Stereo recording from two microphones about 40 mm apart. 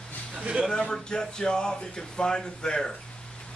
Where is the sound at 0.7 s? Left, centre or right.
Centre.